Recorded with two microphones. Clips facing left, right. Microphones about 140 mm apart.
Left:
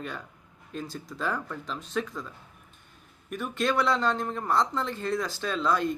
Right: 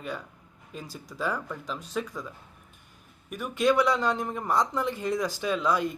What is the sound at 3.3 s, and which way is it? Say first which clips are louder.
Speech: right 4 dB; 10° right (ahead or behind).